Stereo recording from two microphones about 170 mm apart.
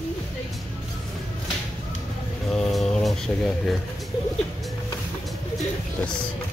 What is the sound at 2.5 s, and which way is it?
Speech, 5° left (ahead or behind).